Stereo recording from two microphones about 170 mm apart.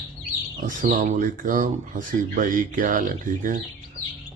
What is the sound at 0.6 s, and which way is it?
Speech, 50° right (ahead or behind).